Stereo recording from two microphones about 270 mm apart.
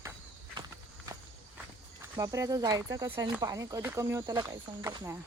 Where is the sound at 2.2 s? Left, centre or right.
Centre.